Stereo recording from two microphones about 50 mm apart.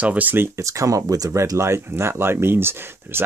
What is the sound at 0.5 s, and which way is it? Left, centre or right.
Speech, right.